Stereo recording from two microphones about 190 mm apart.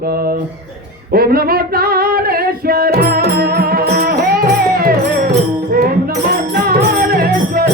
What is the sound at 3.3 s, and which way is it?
Music, 55° right (ahead or behind).